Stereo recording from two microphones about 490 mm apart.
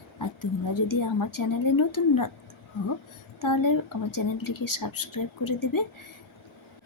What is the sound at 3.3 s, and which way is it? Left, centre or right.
Speech, left.